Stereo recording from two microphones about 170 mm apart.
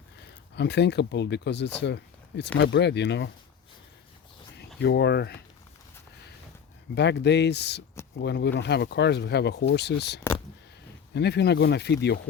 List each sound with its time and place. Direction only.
0.5 s speech: 85° left
4.8 s speech: 85° left
6.9 s speech: 85° left